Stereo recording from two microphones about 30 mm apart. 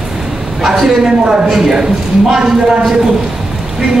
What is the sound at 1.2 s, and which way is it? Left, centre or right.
Speech, right.